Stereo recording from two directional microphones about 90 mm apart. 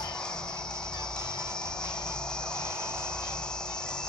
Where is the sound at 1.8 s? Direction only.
10° left (ahead or behind).